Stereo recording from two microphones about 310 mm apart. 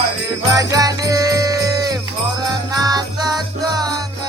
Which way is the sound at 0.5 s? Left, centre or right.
Centre.